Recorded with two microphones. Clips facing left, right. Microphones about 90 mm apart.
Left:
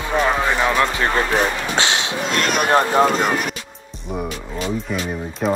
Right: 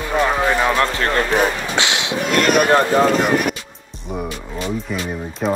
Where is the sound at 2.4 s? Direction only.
50° right (ahead or behind).